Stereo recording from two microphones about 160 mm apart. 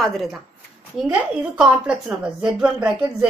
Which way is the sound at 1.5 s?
5° right (ahead or behind).